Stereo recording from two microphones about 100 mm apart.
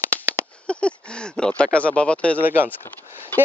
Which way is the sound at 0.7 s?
10° left (ahead or behind).